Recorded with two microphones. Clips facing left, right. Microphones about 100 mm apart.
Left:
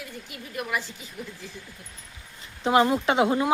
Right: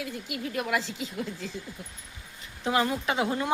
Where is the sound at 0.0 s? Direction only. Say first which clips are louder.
Right 6 dB; 90° right.